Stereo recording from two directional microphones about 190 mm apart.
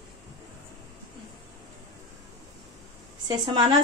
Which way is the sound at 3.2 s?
25° right (ahead or behind).